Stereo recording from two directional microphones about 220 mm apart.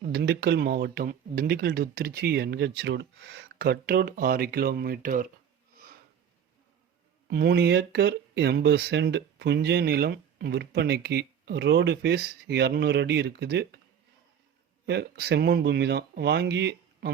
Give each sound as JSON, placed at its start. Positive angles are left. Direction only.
{"t": 0.1, "sound": "speech", "side_deg": -50}
{"t": 7.3, "sound": "speech", "side_deg": -50}
{"t": 14.8, "sound": "speech", "side_deg": -50}